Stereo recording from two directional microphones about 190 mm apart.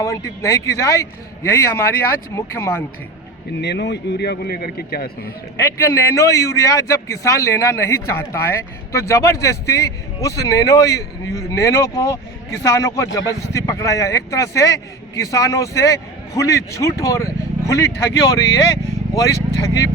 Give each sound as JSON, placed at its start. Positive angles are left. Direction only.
{"t": 0.0, "sound": "a man's voice", "side_deg": 15}
{"t": 3.6, "sound": "a man's voice", "side_deg": 65}
{"t": 5.5, "sound": "a man's voice", "side_deg": 15}